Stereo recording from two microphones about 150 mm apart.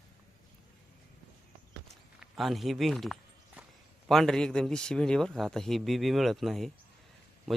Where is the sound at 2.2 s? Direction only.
Centre (ahead or behind).